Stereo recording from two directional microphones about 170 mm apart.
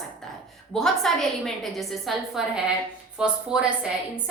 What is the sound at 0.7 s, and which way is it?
A woman's voice, centre (ahead or behind).